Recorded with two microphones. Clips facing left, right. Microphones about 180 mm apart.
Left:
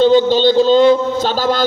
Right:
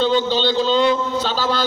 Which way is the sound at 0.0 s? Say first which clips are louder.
Left 7 dB; 45° left (ahead or behind).